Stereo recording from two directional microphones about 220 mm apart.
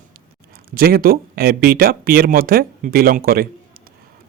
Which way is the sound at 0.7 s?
45° right (ahead or behind).